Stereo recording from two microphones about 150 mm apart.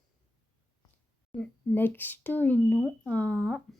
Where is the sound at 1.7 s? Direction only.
15° left (ahead or behind).